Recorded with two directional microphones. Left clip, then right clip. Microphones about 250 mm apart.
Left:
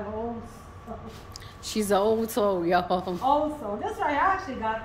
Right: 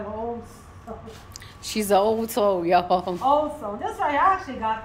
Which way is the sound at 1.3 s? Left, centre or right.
Centre.